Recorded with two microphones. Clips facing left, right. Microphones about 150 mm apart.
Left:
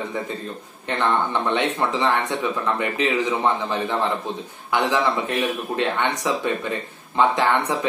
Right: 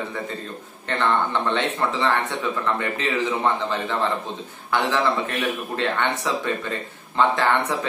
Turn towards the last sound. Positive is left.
turn(degrees=15)  # may be behind; listen again after turning